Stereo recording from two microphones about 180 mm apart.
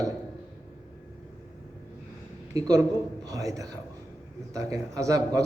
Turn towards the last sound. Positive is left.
turn(degrees=-20)  # may be behind; listen again after turning